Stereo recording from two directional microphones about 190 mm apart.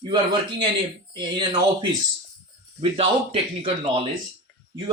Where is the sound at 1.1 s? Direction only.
20° right (ahead or behind).